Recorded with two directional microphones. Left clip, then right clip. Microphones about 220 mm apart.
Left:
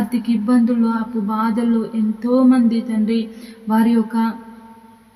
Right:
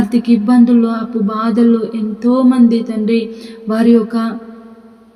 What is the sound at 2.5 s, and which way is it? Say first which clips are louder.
Speech: right 4 dB; 20° right (ahead or behind).